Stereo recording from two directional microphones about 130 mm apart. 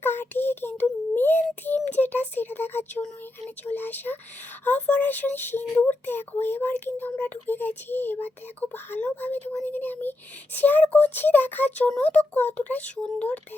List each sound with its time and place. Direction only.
0.0 s child singing: 15° left (ahead or behind)
3.8 s speech: 15° left (ahead or behind)